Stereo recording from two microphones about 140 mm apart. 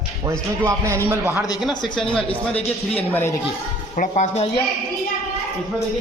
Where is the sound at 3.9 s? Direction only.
60° left (ahead or behind).